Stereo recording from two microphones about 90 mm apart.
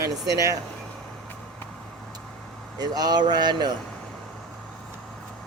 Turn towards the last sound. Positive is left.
turn(degrees=-55)  # may be behind; listen again after turning